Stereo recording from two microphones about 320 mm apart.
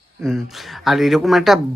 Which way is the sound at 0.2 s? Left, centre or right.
Centre.